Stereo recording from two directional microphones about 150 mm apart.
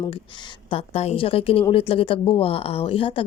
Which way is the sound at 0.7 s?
45° left (ahead or behind).